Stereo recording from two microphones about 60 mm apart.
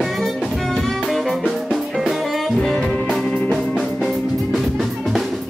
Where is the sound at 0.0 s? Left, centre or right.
Centre.